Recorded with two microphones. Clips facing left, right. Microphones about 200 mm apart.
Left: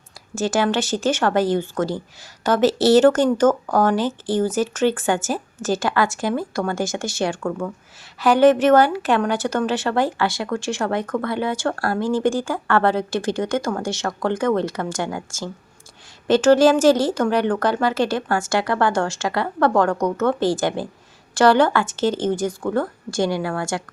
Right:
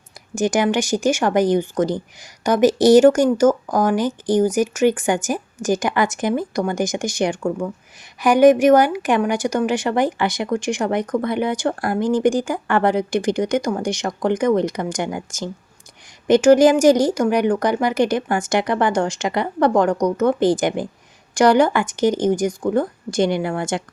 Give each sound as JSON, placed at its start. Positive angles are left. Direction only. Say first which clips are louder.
{"t": 0.3, "sound": "speech", "louder": "right 2 dB", "side_deg": -15}